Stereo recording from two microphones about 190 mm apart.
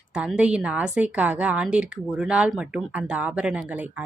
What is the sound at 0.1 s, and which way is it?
A woman's voice, 5° right (ahead or behind).